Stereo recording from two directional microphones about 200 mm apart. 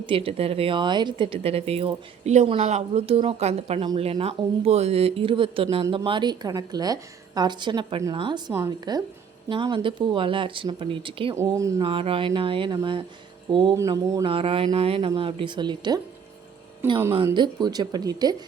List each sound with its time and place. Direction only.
0.0 s speech: 25° right (ahead or behind)
11.3 s speech: 15° right (ahead or behind)
11.9 s speech: 25° right (ahead or behind)
17.2 s speech: 20° right (ahead or behind)